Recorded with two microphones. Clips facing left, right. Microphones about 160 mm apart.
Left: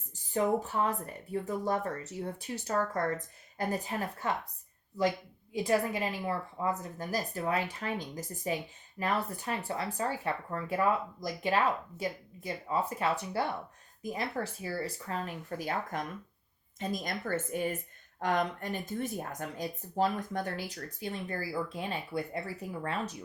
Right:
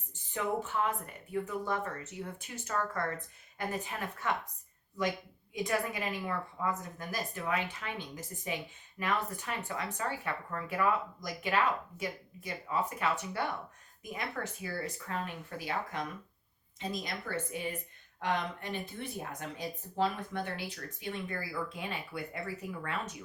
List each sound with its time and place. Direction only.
0.1 s speech: 35° left (ahead or behind)
5.5 s speech: 30° left (ahead or behind)